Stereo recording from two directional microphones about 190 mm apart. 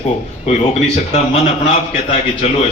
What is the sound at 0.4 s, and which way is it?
A man's voice, 35° left (ahead or behind).